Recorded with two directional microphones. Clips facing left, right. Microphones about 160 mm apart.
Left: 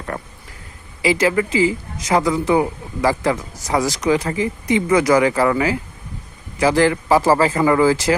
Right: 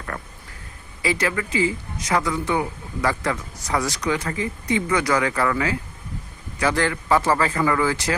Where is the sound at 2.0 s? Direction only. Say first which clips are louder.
Left 6 dB; 25° left (ahead or behind).